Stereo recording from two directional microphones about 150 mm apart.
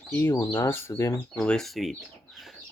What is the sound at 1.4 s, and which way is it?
Speech, 5° left (ahead or behind).